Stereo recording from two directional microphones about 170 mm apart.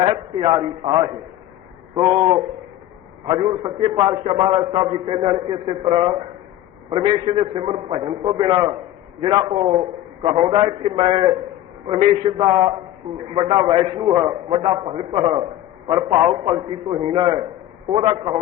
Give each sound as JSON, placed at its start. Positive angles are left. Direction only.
{"t": 0.0, "sound": "a man's voice", "side_deg": -30}